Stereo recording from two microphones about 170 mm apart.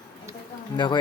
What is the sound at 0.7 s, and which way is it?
Speech, 25° left (ahead or behind).